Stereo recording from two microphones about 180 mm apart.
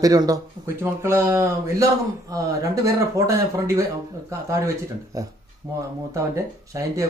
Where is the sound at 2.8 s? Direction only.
20° right (ahead or behind).